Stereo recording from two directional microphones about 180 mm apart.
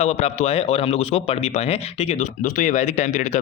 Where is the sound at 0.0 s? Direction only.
35° left (ahead or behind).